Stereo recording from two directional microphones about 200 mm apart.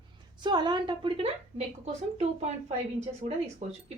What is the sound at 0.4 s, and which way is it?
A woman's voice, 20° right (ahead or behind).